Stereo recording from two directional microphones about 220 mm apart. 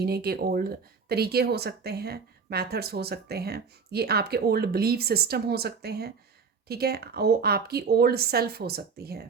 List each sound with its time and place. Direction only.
0.0 s speech: 45° right (ahead or behind)